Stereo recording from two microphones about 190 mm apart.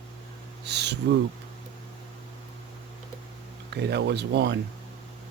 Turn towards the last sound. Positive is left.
turn(degrees=-65)  # may be behind; listen again after turning